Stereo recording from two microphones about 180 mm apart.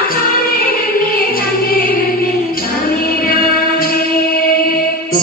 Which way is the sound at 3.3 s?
55° left (ahead or behind).